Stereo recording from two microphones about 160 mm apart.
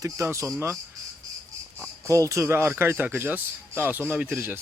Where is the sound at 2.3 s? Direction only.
15° right (ahead or behind).